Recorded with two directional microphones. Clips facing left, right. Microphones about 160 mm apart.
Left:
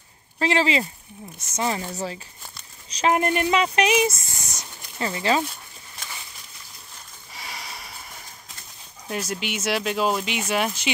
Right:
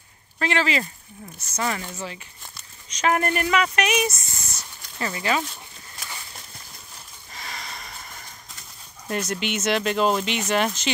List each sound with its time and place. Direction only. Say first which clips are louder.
0.4 s speech: left 2 dB; 30° left (ahead or behind)
1.9 s speech: left 4 dB; 35° left (ahead or behind)
3.2 s speech: left 1 dB; 20° left (ahead or behind)
7.3 s a sound: right 1 dB; 10° left (ahead or behind)
9.0 s speech: right 2 dB; 5° left (ahead or behind)